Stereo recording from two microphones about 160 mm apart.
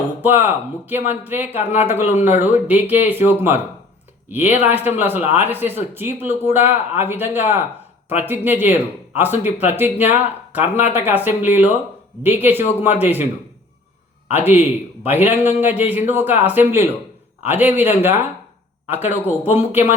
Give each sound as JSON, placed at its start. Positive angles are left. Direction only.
{"t": 0.2, "sound": "a man's voice", "side_deg": -10}
{"t": 1.5, "sound": "speech", "side_deg": 45}
{"t": 1.9, "sound": "a man's voice", "side_deg": -15}
{"t": 5.2, "sound": "speech", "side_deg": 45}
{"t": 5.5, "sound": "a man's voice", "side_deg": -15}
{"t": 14.3, "sound": "a man's voice", "side_deg": -10}